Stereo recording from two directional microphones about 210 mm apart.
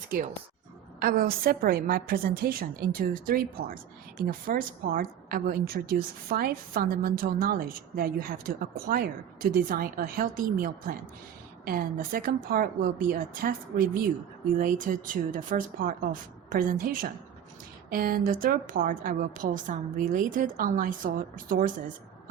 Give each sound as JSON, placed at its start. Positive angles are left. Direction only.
{"t": 0.9, "sound": "a woman's voice", "side_deg": -45}